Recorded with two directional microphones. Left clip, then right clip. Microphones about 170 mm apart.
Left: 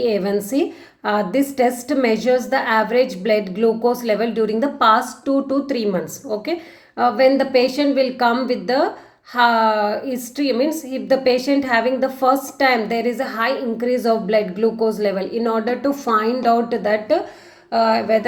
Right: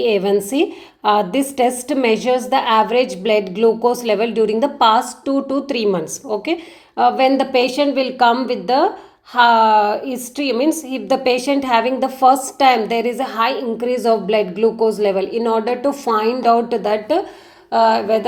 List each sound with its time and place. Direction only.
0.0 s a woman's voice: 35° right (ahead or behind)